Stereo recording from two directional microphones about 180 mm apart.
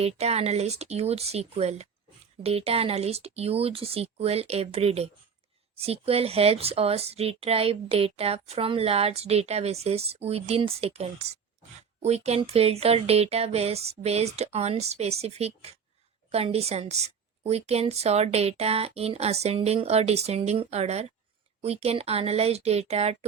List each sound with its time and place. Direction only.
0.0 s a woman's voice: 35° right (ahead or behind)